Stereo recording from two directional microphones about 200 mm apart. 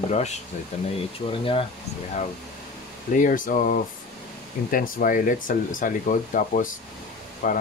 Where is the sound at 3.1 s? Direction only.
40° left (ahead or behind).